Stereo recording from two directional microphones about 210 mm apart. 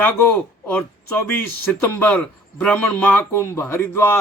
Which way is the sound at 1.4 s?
10° left (ahead or behind).